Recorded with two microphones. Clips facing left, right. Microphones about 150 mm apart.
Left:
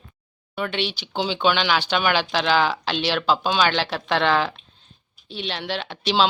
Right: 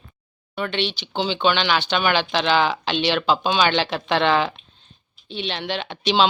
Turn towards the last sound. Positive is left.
turn(degrees=0)  # may be behind; listen again after turning